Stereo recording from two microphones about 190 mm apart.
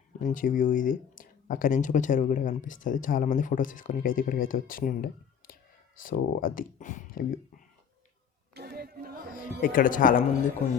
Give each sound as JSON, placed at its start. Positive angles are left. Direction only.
{"t": 0.2, "sound": "speech", "side_deg": 45}
{"t": 8.5, "sound": "a sound", "side_deg": -55}
{"t": 9.3, "sound": "speech", "side_deg": 45}